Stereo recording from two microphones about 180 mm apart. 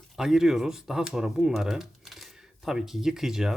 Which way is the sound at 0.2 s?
Centre (ahead or behind).